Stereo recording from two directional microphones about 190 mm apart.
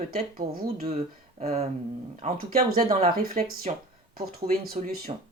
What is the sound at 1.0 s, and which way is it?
Speech, 35° right (ahead or behind).